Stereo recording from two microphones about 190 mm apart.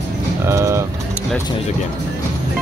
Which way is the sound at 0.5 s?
15° right (ahead or behind).